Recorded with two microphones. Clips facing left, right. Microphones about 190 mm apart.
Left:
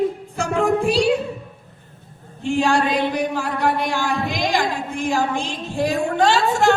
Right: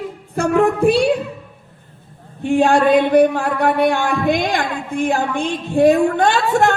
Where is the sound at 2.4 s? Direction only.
55° right (ahead or behind).